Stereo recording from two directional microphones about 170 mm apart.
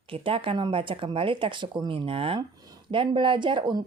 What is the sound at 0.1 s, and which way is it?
Speech, 30° right (ahead or behind).